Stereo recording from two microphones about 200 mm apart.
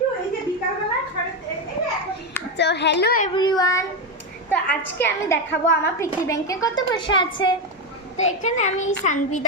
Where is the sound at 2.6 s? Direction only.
60° left (ahead or behind).